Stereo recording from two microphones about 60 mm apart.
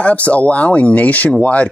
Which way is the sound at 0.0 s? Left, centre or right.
Left.